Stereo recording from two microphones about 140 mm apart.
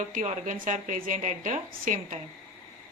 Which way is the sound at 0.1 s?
60° right (ahead or behind).